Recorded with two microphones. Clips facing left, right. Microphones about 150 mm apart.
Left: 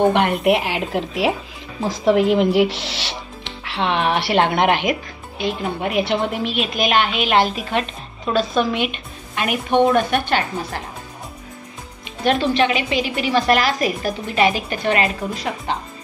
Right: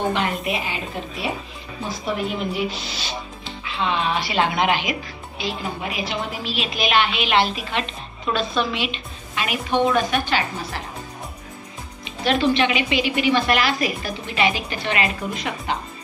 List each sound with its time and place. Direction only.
0.1 s a woman's voice: 60° left (ahead or behind)
12.3 s a woman's voice: 45° left (ahead or behind)